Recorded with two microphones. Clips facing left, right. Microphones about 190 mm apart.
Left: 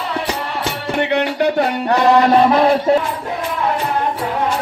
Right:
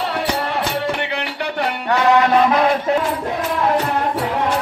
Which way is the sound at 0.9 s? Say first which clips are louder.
Left 8 dB; 45° left (ahead or behind).